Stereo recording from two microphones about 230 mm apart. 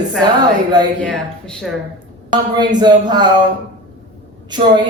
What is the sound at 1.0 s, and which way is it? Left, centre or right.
Speech, centre.